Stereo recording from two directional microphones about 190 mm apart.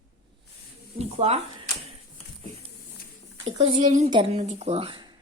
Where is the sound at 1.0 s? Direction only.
35° right (ahead or behind).